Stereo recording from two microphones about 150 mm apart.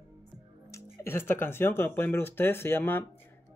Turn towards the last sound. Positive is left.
turn(degrees=15)  # may be behind; listen again after turning